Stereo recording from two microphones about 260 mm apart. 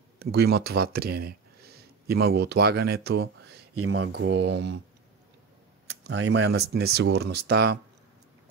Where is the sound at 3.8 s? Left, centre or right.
Right.